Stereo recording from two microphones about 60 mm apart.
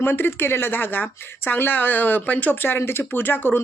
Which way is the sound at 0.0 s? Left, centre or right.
Left.